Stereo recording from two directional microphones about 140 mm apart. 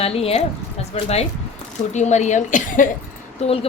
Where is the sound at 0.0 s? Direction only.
45° left (ahead or behind); by 2.8 s 65° left (ahead or behind).